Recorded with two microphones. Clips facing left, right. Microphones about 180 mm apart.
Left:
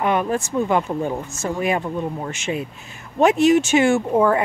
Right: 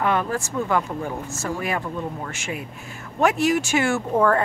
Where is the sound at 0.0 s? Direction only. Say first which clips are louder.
Left 3 dB; 20° left (ahead or behind).